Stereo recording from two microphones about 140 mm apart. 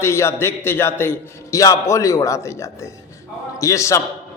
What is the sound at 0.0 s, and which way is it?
A man's voice, 20° left (ahead or behind).